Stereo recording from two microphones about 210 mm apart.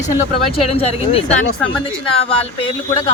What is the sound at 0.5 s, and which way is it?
Speech, 30° left (ahead or behind).